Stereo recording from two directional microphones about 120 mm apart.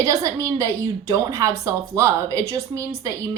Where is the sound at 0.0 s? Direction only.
25° right (ahead or behind).